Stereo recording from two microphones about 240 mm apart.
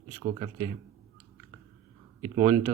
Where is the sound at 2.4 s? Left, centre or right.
Centre.